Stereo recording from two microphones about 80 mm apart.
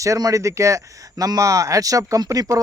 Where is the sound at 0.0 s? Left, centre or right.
Right.